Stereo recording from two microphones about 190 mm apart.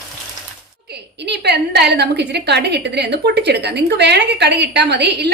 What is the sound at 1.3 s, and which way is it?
A woman's voice, 60° right (ahead or behind).